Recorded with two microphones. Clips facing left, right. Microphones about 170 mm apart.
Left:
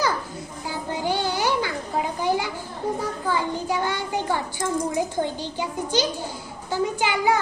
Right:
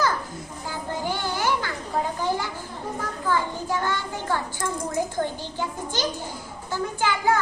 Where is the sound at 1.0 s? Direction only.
20° left (ahead or behind).